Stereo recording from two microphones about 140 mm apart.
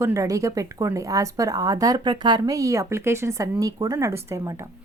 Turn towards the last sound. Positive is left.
turn(degrees=-20)  # may be behind; listen again after turning